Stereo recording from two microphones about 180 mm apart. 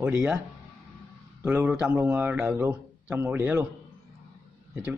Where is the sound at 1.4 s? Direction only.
10° right (ahead or behind).